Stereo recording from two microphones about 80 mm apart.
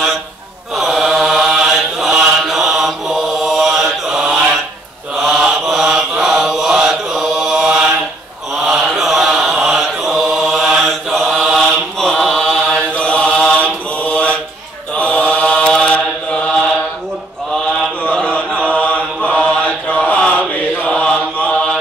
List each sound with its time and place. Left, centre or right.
0.7 s mantra: centre
12.1 s chant: centre
12.9 s mantra: centre
18.0 s chant: centre
18.7 s mantra: centre